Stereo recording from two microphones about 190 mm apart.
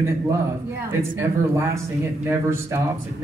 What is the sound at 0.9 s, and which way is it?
Speech, 15° right (ahead or behind).